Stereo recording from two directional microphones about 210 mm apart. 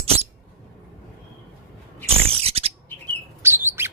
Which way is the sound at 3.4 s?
10° right (ahead or behind).